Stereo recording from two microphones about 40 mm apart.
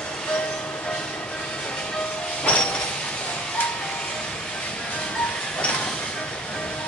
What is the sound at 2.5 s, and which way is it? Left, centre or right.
Train, left.